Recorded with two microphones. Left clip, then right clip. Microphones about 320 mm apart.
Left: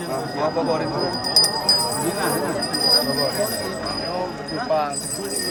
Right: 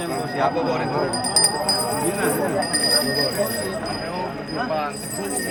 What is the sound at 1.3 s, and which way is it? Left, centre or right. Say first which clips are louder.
Jingle bell: left 5 dB; right.